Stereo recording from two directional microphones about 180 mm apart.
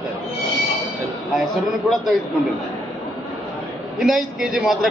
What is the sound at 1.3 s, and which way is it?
Speech, centre (ahead or behind).